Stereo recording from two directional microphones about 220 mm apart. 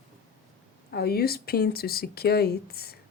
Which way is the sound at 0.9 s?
45° left (ahead or behind).